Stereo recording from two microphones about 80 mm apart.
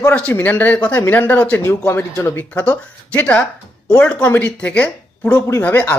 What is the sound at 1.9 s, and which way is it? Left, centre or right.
Speech, left.